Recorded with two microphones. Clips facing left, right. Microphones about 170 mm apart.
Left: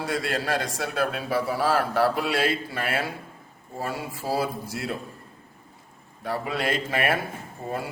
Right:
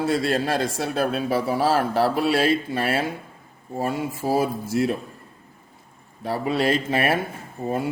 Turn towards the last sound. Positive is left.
turn(degrees=-20)  # may be behind; listen again after turning